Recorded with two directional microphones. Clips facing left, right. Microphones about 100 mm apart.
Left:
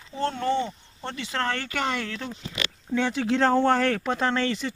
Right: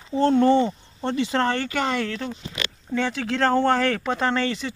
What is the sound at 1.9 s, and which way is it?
Speech, 5° left (ahead or behind).